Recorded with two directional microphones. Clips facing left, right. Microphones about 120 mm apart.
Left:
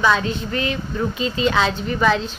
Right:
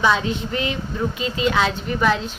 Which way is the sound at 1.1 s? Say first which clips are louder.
Left 1 dB; 10° right (ahead or behind).